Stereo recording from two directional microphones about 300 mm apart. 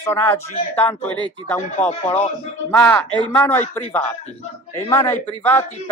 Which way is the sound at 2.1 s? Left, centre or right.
Centre.